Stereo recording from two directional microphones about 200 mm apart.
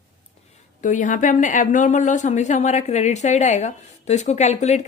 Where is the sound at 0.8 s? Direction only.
40° left (ahead or behind).